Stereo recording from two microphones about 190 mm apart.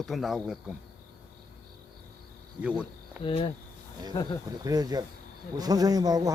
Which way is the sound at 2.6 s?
5° right (ahead or behind).